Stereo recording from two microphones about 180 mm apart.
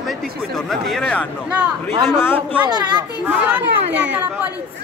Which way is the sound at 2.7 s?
25° right (ahead or behind).